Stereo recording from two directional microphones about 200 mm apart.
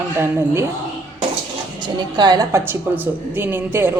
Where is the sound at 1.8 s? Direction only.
20° right (ahead or behind).